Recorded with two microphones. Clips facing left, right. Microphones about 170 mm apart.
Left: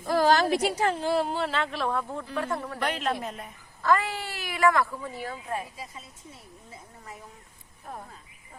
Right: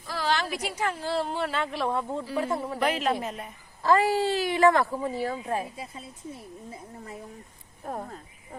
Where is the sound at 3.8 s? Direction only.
30° right (ahead or behind).